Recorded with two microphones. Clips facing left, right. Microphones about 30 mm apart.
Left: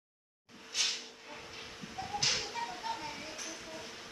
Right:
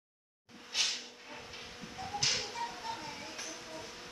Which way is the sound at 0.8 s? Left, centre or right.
Right.